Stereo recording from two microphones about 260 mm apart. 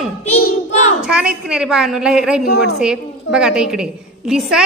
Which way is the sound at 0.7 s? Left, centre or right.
Left.